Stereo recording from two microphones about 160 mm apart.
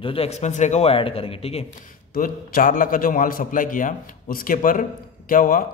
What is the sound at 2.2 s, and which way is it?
A man's voice, 60° left (ahead or behind).